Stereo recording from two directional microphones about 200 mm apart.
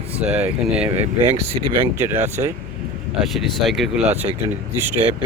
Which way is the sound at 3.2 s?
Centre (ahead or behind).